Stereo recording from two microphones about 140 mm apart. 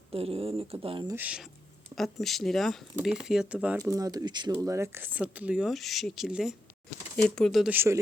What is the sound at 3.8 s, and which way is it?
Speech, 25° right (ahead or behind).